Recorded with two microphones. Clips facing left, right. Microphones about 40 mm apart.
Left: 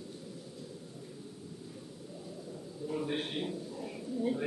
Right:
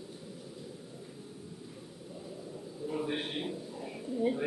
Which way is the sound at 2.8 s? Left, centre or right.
Centre.